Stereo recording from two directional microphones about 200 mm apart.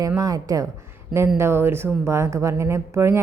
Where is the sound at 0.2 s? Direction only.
20° right (ahead or behind).